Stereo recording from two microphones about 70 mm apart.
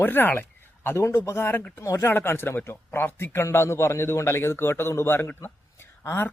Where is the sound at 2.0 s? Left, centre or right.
Left.